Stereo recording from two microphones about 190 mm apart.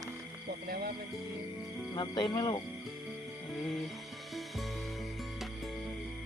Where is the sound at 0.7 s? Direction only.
50° right (ahead or behind).